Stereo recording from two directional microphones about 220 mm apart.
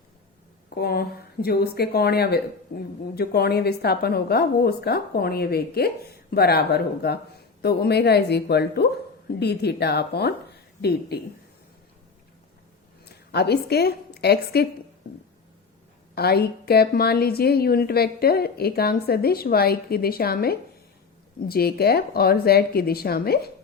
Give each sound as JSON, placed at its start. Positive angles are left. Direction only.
{"t": 0.7, "sound": "a woman's voice", "side_deg": 45}
{"t": 13.1, "sound": "a woman's voice", "side_deg": 50}
{"t": 16.1, "sound": "a woman's voice", "side_deg": 45}